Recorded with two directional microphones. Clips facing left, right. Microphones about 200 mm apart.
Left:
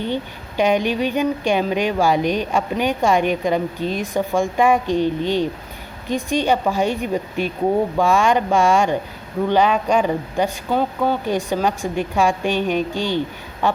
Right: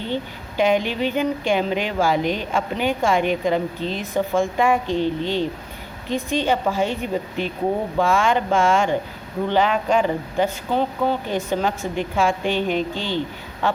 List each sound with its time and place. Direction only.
0.0 s speech: 15° left (ahead or behind)